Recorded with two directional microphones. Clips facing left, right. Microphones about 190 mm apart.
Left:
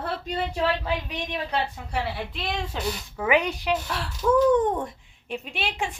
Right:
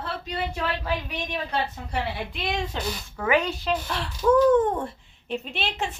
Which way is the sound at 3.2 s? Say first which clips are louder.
Even; 15° left (ahead or behind).